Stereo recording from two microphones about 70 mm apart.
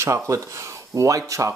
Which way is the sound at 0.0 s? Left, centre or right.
Right.